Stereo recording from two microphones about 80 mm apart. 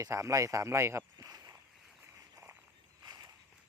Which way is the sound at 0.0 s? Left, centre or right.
Right.